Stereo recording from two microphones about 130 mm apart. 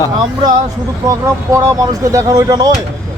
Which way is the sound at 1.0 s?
25° right (ahead or behind).